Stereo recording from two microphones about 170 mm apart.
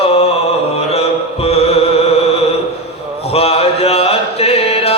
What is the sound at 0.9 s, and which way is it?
Music, 35° left (ahead or behind).